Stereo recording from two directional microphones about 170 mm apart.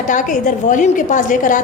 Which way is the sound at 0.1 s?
50° left (ahead or behind).